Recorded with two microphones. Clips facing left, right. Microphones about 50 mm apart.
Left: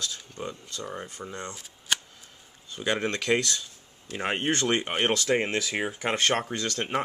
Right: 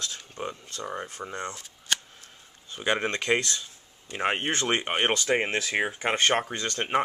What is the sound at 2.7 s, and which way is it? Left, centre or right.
Speech, centre.